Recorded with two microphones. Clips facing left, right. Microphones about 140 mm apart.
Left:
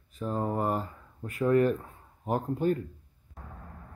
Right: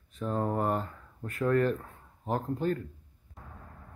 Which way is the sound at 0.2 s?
5° left (ahead or behind).